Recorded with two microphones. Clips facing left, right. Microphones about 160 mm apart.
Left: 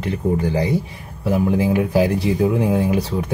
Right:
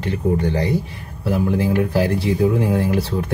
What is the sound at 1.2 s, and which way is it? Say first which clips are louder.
Speech: left 1 dB; 15° left (ahead or behind).